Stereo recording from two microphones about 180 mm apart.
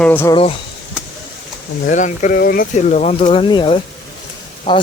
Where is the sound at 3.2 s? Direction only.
30° left (ahead or behind).